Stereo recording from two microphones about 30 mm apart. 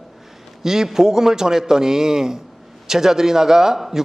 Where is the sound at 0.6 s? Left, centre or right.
Centre.